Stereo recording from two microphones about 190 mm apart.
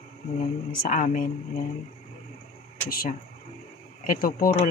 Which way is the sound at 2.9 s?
50° left (ahead or behind).